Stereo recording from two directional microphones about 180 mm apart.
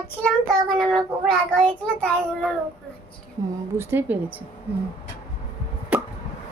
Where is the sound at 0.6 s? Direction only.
Centre (ahead or behind).